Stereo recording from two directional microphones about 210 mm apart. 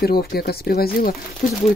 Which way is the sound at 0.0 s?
45° left (ahead or behind).